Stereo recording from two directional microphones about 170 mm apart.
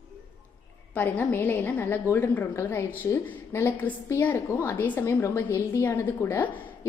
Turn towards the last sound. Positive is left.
turn(degrees=10)  # may be behind; listen again after turning